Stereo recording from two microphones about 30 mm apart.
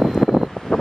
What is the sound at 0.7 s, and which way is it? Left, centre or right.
Wind noise, left.